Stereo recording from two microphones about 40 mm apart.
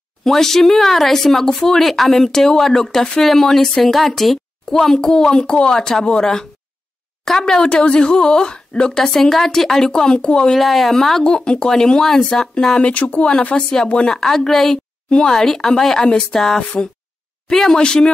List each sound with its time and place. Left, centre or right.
0.2 s speech: centre
10.5 s speech: centre
11.2 s speech: left
12.8 s speech: left
13.3 s speech: left
14.0 s a woman's voice: centre
16.0 s speech: left
16.3 s speech: centre